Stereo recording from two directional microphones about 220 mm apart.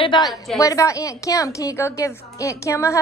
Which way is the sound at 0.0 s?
20° left (ahead or behind).